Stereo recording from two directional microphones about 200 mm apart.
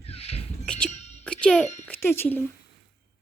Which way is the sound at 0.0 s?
30° left (ahead or behind).